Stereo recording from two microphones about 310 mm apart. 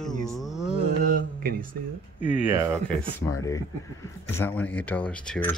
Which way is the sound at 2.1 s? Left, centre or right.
Centre.